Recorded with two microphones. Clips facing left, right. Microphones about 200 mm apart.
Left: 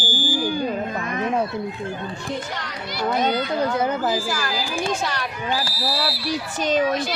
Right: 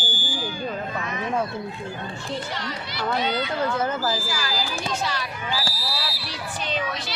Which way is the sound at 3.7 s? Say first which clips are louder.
Left 3 dB; 15° left (ahead or behind).